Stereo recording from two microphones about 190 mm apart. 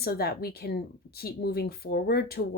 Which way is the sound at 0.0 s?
55° left (ahead or behind).